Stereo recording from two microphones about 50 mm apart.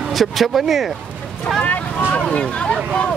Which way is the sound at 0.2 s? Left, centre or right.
Centre.